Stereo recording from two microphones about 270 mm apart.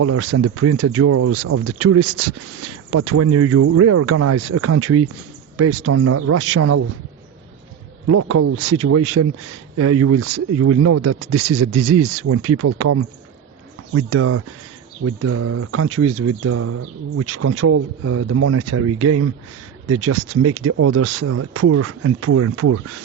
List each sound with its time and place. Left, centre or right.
0.0 s speech: right
8.0 s speech: right